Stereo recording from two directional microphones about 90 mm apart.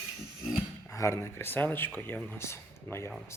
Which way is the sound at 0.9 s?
35° left (ahead or behind).